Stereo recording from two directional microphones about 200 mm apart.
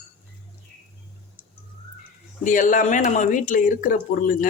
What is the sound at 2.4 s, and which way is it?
Speech, 40° left (ahead or behind).